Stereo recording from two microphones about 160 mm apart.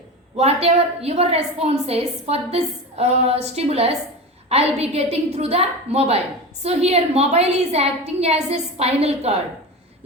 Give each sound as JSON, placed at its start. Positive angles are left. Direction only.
{"t": 0.3, "sound": "a woman's voice", "side_deg": -40}